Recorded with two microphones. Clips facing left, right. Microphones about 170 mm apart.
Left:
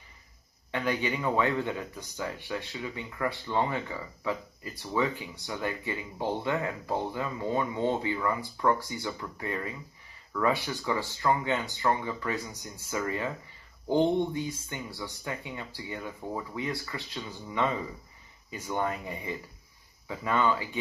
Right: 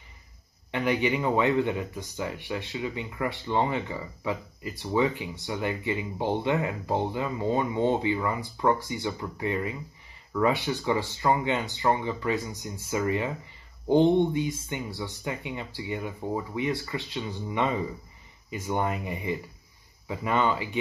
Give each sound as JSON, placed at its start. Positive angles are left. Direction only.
{"t": 0.7, "sound": "speech", "side_deg": -15}